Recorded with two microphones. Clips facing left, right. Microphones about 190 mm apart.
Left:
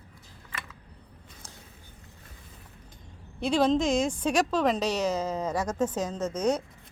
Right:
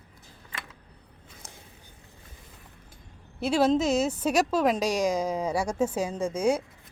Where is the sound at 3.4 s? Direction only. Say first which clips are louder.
Right 1 dB; 5° right (ahead or behind).